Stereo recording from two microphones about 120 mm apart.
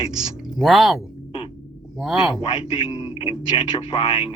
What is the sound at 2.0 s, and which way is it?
Speech, 5° right (ahead or behind).